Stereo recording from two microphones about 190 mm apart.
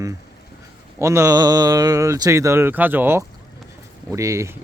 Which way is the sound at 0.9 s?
15° right (ahead or behind).